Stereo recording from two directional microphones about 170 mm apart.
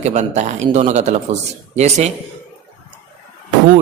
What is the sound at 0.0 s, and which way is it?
Speech, 40° right (ahead or behind).